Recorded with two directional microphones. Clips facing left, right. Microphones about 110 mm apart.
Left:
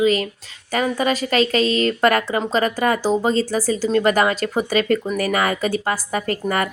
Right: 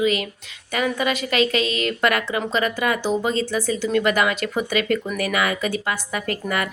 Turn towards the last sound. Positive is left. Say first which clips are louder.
# left 3 dB
turn(degrees=40)  # may be behind; listen again after turning